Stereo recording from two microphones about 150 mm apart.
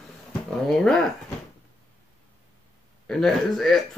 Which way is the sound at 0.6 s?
5° left (ahead or behind).